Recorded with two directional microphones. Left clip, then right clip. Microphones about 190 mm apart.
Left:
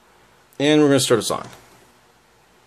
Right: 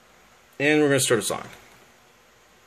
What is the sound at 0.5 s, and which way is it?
Speech, 15° left (ahead or behind).